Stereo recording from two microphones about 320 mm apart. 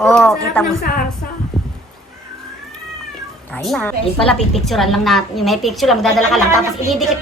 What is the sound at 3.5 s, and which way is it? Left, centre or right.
A woman's voice, centre.